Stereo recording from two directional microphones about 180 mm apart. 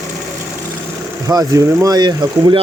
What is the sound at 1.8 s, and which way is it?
Speech, 20° right (ahead or behind).